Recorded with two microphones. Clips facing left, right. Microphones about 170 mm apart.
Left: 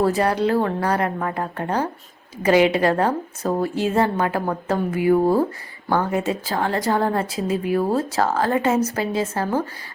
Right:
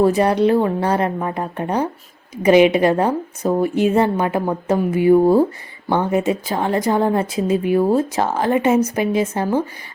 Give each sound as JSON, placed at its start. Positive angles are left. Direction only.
{"t": 0.0, "sound": "a woman's voice", "side_deg": -20}